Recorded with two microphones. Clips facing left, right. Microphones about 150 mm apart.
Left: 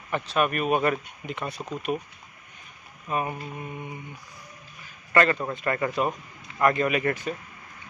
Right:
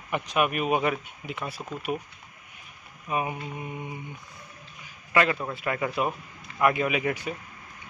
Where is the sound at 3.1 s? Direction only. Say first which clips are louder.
Even; 10° right (ahead or behind).